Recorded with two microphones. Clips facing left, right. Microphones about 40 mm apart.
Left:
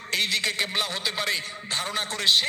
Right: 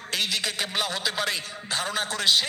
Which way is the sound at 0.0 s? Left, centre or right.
Left.